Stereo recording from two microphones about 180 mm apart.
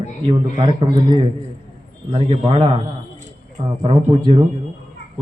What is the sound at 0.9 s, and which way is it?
A man's voice, 25° right (ahead or behind).